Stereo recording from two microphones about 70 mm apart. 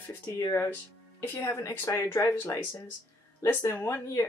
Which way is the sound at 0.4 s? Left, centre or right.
Left.